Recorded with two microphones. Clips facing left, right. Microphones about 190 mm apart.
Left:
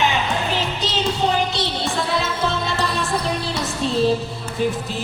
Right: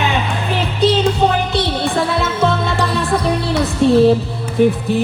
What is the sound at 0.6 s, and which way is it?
Music, 60° right (ahead or behind).